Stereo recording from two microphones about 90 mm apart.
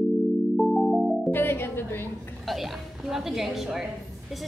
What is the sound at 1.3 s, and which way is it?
Music, 25° left (ahead or behind).